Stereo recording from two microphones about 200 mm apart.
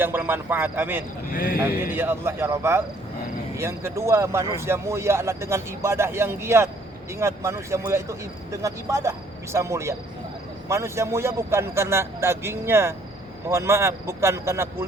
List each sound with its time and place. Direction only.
0.0 s a man's voice: 10° right (ahead or behind)
1.3 s speech: 45° left (ahead or behind)
1.8 s a man's voice: 10° right (ahead or behind)